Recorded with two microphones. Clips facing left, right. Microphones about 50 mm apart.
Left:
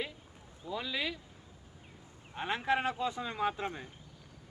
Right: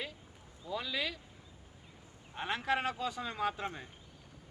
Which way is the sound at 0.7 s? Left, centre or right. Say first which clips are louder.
Left 1 dB; centre.